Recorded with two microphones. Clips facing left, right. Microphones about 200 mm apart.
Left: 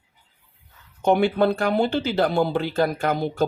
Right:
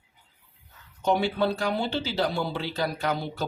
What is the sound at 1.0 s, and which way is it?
Speech, 55° left (ahead or behind).